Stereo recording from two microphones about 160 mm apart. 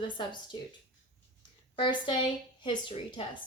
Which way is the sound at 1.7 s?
30° left (ahead or behind).